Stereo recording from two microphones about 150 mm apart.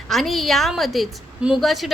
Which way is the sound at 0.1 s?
Centre (ahead or behind).